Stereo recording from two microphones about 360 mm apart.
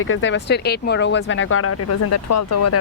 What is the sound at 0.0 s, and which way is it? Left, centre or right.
Speech, left.